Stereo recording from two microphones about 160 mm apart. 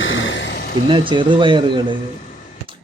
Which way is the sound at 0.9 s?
30° right (ahead or behind).